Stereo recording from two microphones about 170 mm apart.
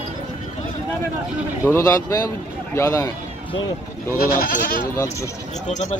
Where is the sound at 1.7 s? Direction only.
20° left (ahead or behind).